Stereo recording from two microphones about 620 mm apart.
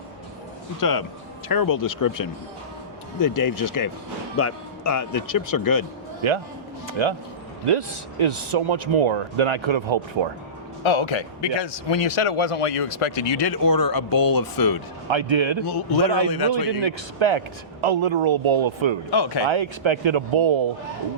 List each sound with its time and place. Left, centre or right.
0.8 s speech: left
6.2 s speech: right
10.8 s speech: left
15.0 s speech: right
19.1 s speech: left
19.5 s speech: right